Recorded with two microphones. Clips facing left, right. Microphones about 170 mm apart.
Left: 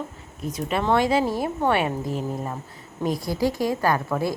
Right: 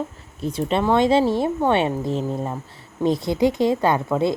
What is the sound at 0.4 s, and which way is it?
Speech, 30° right (ahead or behind).